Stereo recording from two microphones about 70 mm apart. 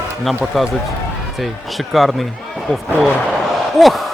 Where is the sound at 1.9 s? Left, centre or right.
Centre.